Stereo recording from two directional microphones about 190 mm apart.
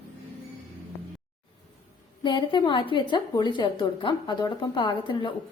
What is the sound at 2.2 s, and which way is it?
A woman's voice, 25° left (ahead or behind).